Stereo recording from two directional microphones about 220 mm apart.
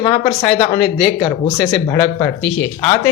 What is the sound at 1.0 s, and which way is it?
Speech, 20° left (ahead or behind).